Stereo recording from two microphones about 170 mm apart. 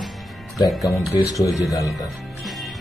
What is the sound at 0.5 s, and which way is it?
Speech, centre (ahead or behind).